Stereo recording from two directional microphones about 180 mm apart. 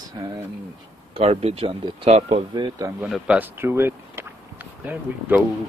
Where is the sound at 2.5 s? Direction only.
25° right (ahead or behind).